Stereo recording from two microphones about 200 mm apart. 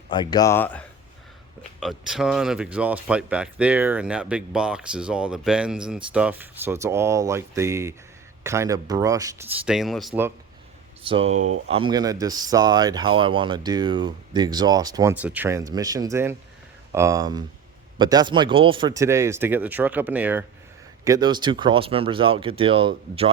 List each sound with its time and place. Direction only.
0.1 s speech: 20° left (ahead or behind); by 9.5 s 15° right (ahead or behind)
9.6 s speech: centre (ahead or behind)
11.0 s speech: 25° right (ahead or behind)
15.1 s speech: 5° right (ahead or behind)
21.0 s speech: 20° right (ahead or behind)